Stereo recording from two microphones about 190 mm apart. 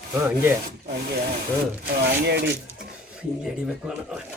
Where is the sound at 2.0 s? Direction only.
60° right (ahead or behind).